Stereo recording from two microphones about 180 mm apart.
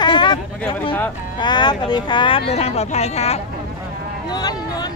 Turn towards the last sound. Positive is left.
turn(degrees=20)  # may be behind; listen again after turning